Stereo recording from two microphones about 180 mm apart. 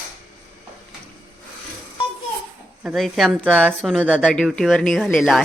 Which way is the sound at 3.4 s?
10° right (ahead or behind).